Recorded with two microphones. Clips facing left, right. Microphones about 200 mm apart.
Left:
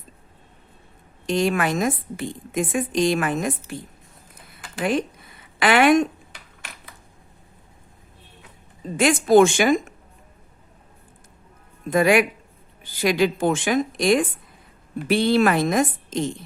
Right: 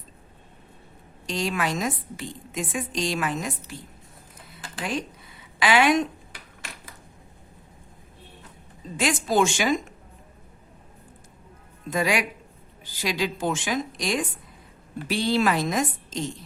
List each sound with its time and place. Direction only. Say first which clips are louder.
1.3 s a woman's voice: left 6 dB; 55° left (ahead or behind)
4.8 s a woman's voice: left 7 dB; 55° left (ahead or behind)
9.0 s a woman's voice: left 8 dB; 55° left (ahead or behind)
11.9 s a woman's voice: left 7 dB; 55° left (ahead or behind)